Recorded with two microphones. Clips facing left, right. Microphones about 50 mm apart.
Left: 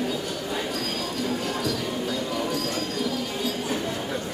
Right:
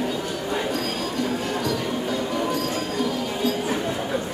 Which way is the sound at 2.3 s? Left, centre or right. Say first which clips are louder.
Right 3 dB; centre.